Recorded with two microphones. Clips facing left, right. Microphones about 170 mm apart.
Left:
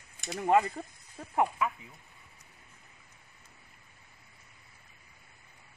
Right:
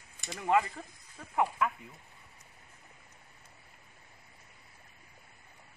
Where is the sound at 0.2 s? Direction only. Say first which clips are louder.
Left 3 dB; 40° left (ahead or behind).